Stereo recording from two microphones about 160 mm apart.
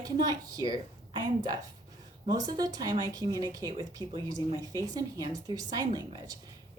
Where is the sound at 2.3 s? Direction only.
25° right (ahead or behind).